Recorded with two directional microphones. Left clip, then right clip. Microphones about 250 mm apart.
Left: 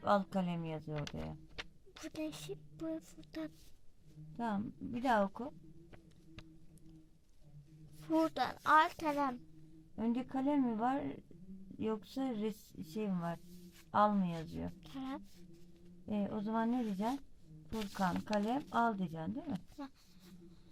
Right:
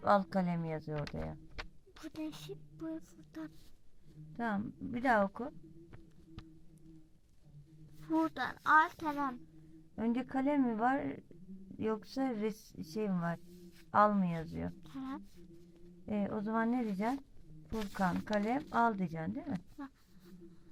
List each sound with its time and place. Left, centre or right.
0.0 s speech: centre
2.0 s speech: centre
4.4 s speech: centre
8.0 s speech: left
9.9 s speech: centre
14.8 s speech: left
16.0 s speech: centre